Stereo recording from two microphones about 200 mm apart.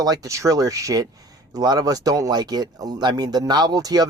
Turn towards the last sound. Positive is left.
turn(degrees=-20)  # may be behind; listen again after turning